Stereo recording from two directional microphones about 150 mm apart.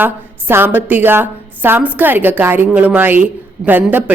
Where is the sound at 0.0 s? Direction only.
15° right (ahead or behind).